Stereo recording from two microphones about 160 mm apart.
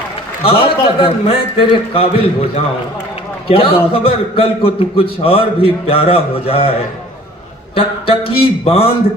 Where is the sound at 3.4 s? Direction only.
35° left (ahead or behind).